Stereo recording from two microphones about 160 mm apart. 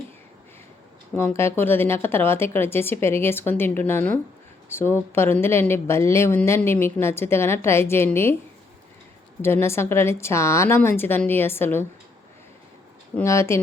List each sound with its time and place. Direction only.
1.1 s speech: 15° left (ahead or behind)
9.4 s speech: 15° left (ahead or behind)
13.1 s speech: 20° left (ahead or behind)